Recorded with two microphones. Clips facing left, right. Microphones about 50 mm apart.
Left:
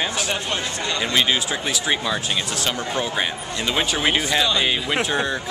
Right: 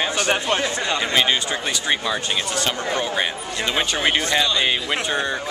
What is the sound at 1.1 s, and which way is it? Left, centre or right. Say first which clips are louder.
Speech: left 1 dB; centre.